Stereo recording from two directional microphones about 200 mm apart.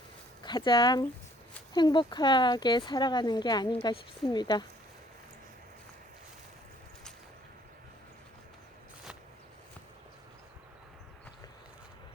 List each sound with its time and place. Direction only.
0.4 s speech: 20° left (ahead or behind)